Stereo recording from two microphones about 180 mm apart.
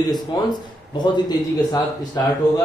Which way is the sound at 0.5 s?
25° left (ahead or behind).